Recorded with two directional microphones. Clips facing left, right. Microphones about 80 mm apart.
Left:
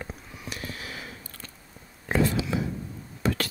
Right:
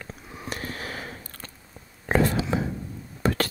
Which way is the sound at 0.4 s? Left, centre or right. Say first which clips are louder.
Right 5 dB; right.